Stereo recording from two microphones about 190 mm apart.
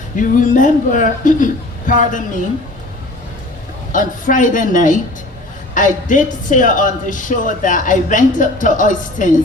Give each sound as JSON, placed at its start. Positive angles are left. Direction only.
{"t": 0.2, "sound": "speech", "side_deg": 45}
{"t": 3.9, "sound": "speech", "side_deg": 45}